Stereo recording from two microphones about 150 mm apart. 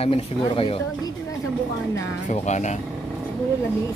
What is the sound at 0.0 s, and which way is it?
Speech, 40° left (ahead or behind).